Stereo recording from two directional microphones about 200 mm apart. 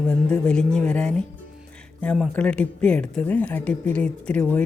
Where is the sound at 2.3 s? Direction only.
5° left (ahead or behind).